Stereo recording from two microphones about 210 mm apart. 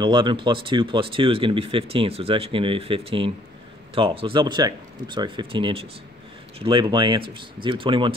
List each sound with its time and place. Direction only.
0.0 s speech: 20° right (ahead or behind)